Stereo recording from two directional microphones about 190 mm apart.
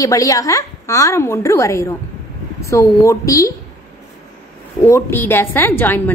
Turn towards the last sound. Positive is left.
turn(degrees=10)  # may be behind; listen again after turning